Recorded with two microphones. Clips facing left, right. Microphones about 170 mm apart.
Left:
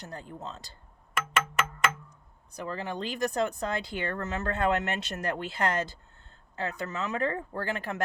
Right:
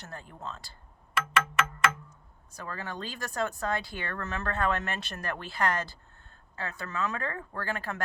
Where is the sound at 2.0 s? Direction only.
15° left (ahead or behind).